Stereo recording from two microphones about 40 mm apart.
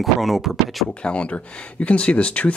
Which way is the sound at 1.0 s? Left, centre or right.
Left.